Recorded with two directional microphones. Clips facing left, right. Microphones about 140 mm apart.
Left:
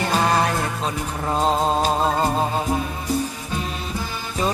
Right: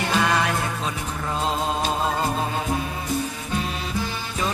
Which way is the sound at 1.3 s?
40° left (ahead or behind).